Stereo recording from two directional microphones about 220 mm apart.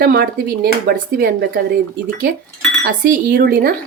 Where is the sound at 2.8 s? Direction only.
40° right (ahead or behind).